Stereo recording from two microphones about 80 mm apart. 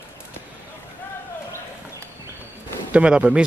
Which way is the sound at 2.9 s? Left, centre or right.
Centre.